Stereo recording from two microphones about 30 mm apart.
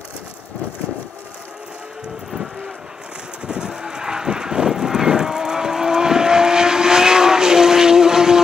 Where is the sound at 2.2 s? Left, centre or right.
Centre.